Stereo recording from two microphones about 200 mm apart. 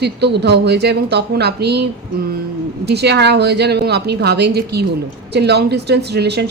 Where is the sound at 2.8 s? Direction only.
55° right (ahead or behind).